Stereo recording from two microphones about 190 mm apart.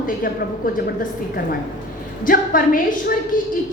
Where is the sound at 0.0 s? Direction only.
45° left (ahead or behind).